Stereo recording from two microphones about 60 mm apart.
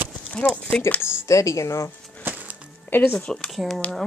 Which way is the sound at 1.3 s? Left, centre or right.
Left.